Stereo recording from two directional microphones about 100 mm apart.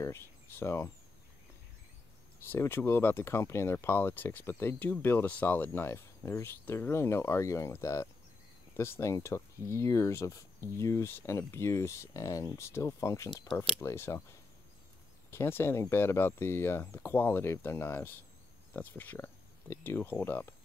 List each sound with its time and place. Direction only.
0.0 s speech: 25° left (ahead or behind)
2.4 s speech: 20° left (ahead or behind)
15.3 s speech: 25° left (ahead or behind)